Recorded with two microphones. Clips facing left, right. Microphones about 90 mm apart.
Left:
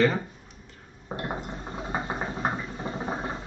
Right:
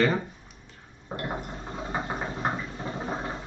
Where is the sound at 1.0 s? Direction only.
20° left (ahead or behind).